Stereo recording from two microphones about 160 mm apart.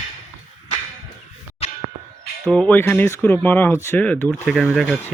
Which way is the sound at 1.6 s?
40° left (ahead or behind).